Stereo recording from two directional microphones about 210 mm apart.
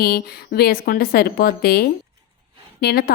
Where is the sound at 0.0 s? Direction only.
45° left (ahead or behind).